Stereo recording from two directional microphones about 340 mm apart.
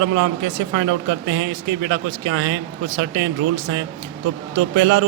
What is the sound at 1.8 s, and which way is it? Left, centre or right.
Speech, right.